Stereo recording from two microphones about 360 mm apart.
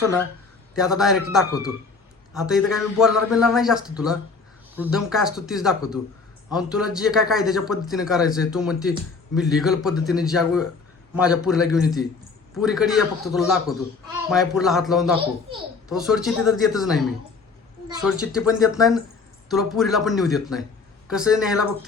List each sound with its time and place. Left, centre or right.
0.8 s a man's voice: centre
2.3 s a man's voice: centre